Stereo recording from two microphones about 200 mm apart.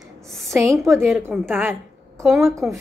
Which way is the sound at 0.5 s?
15° right (ahead or behind).